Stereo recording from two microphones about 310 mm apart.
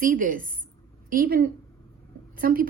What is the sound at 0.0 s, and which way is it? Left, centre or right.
A woman's voice, right.